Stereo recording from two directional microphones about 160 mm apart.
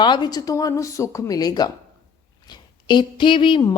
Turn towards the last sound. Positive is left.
turn(degrees=30)  # may be behind; listen again after turning